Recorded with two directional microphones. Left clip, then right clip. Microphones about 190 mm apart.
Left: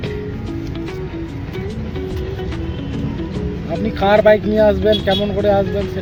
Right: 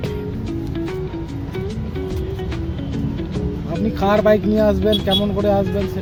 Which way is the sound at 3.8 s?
45° right (ahead or behind).